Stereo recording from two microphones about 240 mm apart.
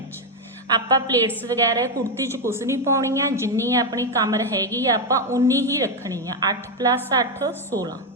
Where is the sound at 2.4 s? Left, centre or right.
Centre.